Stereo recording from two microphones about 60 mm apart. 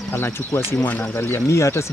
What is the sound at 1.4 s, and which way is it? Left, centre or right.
Speech, left.